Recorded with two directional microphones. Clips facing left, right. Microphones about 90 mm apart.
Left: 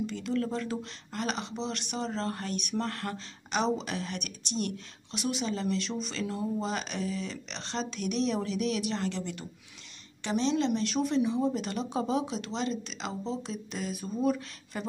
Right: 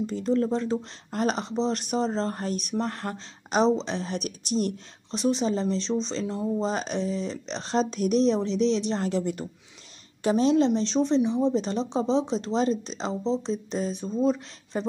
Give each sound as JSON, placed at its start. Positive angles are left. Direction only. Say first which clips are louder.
{"t": 0.0, "sound": "speech", "louder": "right 6 dB", "side_deg": -35}
{"t": 1.1, "sound": "speech", "louder": "right 7 dB", "side_deg": -40}
{"t": 3.4, "sound": "speech", "louder": "right 7 dB", "side_deg": -40}